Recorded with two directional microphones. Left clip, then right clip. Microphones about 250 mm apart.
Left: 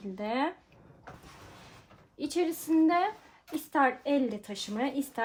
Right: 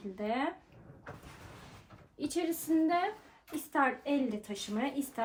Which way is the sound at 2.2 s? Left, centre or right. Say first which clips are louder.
Left 4 dB; left.